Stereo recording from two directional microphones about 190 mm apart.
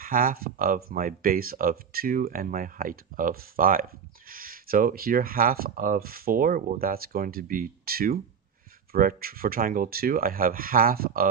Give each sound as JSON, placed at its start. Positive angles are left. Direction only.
{"t": 0.0, "sound": "speech", "side_deg": -50}